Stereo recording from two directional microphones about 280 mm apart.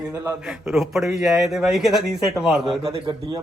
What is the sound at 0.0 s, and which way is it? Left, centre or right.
A man's voice, centre.